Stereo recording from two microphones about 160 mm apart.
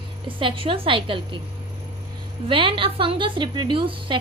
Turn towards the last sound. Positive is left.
turn(degrees=-30)  # may be behind; listen again after turning